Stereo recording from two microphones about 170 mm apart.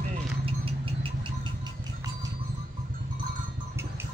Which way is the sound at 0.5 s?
35° right (ahead or behind).